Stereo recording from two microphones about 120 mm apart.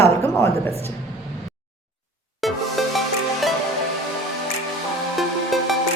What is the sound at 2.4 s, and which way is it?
Music, centre (ahead or behind).